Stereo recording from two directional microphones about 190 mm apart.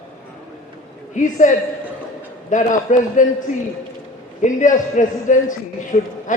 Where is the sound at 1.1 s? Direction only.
40° left (ahead or behind).